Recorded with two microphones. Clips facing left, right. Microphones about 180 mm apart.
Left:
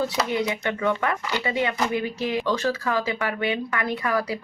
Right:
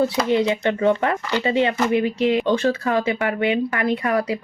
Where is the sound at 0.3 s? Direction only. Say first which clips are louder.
Right 6 dB; 25° right (ahead or behind).